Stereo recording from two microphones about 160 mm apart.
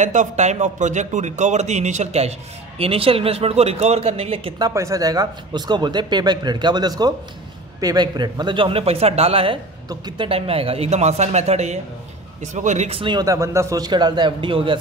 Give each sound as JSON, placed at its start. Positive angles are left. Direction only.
{"t": 0.0, "sound": "speech", "side_deg": -50}
{"t": 4.6, "sound": "speech", "side_deg": -20}